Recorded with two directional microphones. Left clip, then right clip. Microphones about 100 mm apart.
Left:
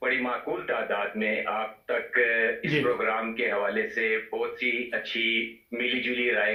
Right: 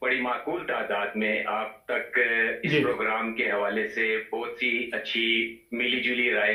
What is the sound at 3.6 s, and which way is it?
Speech, 35° left (ahead or behind).